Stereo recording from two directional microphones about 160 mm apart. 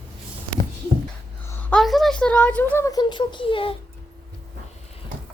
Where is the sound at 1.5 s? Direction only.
10° left (ahead or behind).